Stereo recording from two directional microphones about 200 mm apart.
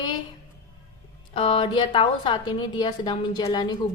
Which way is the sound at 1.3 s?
30° left (ahead or behind).